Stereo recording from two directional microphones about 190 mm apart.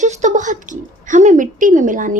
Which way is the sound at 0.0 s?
40° right (ahead or behind).